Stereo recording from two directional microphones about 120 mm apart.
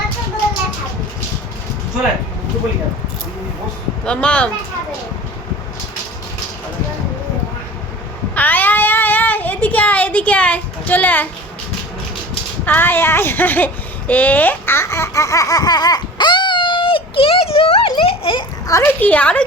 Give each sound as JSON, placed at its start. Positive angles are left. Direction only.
{"t": 4.0, "sound": "speech", "side_deg": 10}
{"t": 8.4, "sound": "cat", "side_deg": 15}
{"t": 12.6, "sound": "speech", "side_deg": 15}
{"t": 14.1, "sound": "baby laughter", "side_deg": 15}
{"t": 18.7, "sound": "speech", "side_deg": 20}